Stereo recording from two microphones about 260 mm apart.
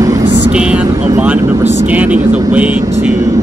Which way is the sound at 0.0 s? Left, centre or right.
Centre.